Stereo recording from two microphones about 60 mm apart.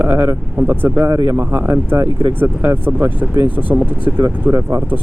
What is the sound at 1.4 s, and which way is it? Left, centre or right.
Speech, right.